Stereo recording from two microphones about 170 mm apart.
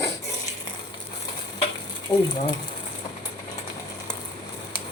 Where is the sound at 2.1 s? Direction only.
25° left (ahead or behind).